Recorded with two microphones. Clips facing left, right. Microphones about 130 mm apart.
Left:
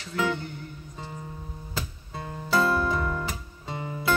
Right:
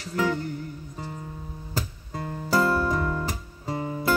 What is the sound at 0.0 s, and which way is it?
Music, 40° right (ahead or behind).